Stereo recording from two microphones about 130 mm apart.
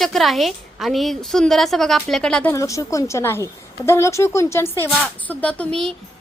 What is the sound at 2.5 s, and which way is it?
Speech, 25° left (ahead or behind).